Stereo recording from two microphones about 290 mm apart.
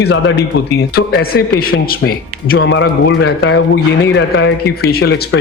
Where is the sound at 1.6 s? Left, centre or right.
Left.